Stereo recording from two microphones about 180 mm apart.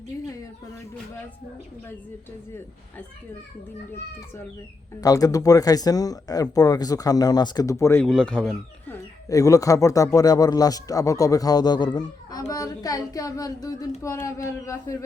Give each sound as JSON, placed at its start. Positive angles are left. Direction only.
{"t": 4.9, "sound": "speech", "side_deg": 20}
{"t": 8.0, "sound": "speech", "side_deg": 5}
{"t": 9.3, "sound": "speech", "side_deg": 20}